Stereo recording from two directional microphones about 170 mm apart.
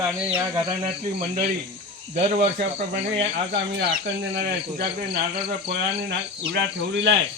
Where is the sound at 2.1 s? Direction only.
45° right (ahead or behind).